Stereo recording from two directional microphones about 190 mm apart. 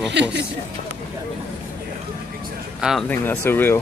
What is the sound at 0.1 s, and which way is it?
Speech, 65° right (ahead or behind).